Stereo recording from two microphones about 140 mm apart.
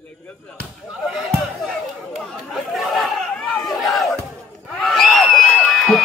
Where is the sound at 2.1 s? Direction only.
Centre (ahead or behind).